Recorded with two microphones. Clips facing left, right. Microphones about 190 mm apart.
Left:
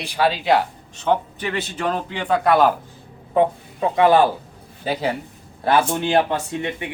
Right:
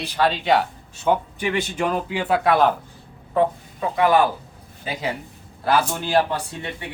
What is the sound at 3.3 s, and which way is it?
A man's voice, 30° left (ahead or behind).